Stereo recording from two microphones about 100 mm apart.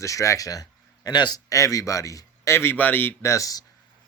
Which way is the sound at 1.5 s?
35° left (ahead or behind).